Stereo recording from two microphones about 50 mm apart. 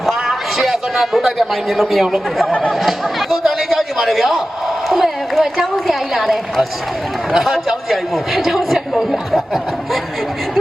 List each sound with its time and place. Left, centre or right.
0.0 s a man's voice: centre